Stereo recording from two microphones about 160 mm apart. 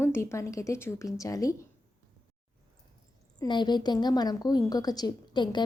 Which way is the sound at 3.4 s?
25° left (ahead or behind).